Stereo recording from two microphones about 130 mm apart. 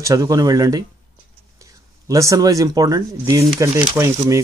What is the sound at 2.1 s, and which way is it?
Speech, 25° right (ahead or behind).